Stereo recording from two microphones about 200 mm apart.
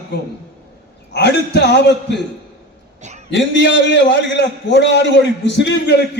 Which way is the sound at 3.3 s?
65° left (ahead or behind).